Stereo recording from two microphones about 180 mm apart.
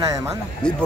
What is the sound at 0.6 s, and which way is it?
Speech, 5° left (ahead or behind).